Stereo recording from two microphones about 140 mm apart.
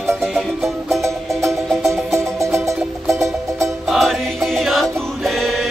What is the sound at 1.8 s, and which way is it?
Music, 20° right (ahead or behind).